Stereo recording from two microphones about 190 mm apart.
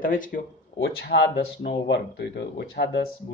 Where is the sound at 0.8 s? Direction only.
60° left (ahead or behind).